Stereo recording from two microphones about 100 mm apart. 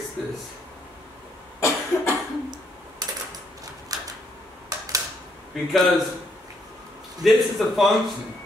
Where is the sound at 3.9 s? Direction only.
35° right (ahead or behind).